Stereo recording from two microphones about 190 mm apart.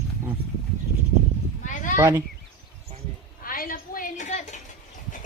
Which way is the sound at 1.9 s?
15° right (ahead or behind).